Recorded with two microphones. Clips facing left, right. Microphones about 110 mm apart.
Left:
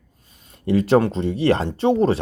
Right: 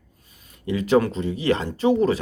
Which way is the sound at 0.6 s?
35° left (ahead or behind).